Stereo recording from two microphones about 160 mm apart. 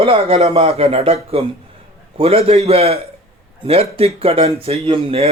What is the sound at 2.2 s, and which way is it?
A man's voice, 40° right (ahead or behind).